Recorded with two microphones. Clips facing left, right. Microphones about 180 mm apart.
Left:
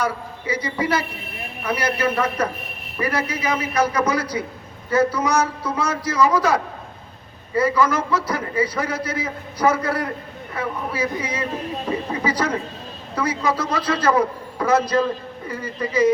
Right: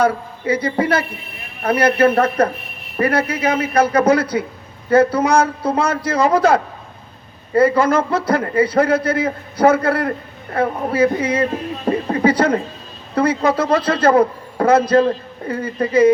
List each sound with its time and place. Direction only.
0.0 s a man's voice: 55° right (ahead or behind)